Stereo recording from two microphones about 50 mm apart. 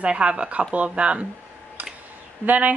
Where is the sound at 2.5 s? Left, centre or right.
Right.